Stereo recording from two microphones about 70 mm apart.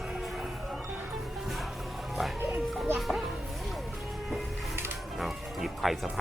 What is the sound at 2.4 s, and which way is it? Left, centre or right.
Music, right.